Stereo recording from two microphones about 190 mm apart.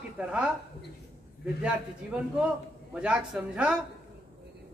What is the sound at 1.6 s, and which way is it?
A man's voice, 5° right (ahead or behind).